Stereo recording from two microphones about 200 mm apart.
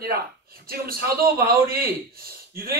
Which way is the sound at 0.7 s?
50° right (ahead or behind).